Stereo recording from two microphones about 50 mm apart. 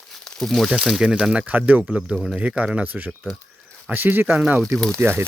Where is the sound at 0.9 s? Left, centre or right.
Centre.